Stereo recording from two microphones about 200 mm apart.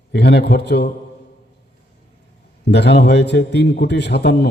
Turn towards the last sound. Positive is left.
turn(degrees=60)  # may be behind; listen again after turning